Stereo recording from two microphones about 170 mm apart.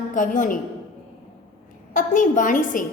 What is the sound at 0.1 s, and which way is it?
Speech, 50° left (ahead or behind).